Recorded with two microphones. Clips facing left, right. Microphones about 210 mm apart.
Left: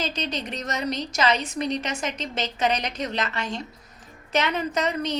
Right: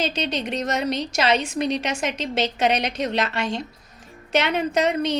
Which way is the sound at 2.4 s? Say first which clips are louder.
Right 4 dB; 70° right (ahead or behind).